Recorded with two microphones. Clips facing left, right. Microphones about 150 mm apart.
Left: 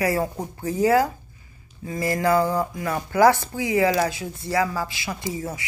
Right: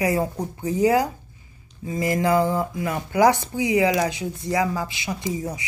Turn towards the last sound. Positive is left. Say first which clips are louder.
# right 2 dB
turn(degrees=-20)  # may be behind; listen again after turning